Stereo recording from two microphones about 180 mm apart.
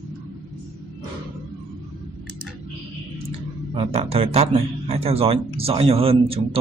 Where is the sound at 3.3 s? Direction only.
30° right (ahead or behind).